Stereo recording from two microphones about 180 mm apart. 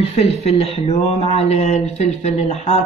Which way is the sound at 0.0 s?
35° left (ahead or behind).